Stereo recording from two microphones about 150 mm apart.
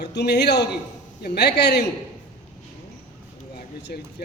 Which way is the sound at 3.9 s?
80° left.